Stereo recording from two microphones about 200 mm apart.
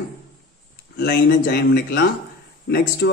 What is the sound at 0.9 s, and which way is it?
A man's voice, 55° left (ahead or behind).